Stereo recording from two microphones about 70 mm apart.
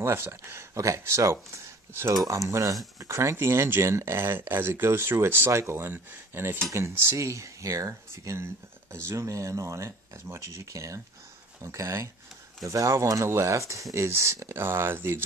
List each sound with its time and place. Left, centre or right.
0.0 s speech: right
3.2 s speech: right
7.2 s speech: right